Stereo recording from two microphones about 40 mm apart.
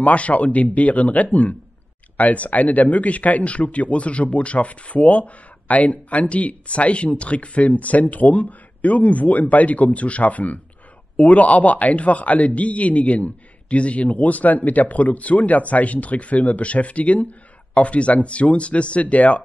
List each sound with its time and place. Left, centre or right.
0.0 s a man's voice: left